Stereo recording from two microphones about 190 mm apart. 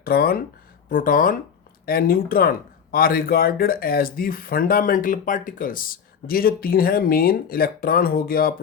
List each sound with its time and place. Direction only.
0.0 s speech: 55° left (ahead or behind)